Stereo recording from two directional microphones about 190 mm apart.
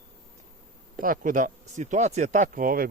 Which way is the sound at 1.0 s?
45° right (ahead or behind).